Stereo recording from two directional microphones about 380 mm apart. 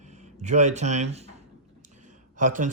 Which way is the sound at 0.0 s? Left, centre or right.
Centre.